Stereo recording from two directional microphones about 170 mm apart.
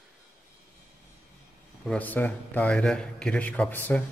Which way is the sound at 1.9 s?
10° left (ahead or behind).